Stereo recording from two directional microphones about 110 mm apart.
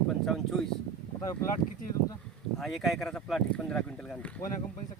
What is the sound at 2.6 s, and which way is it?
Speech, centre (ahead or behind).